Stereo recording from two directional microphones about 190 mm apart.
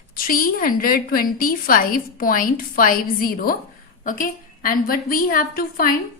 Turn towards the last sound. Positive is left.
turn(degrees=45)  # may be behind; listen again after turning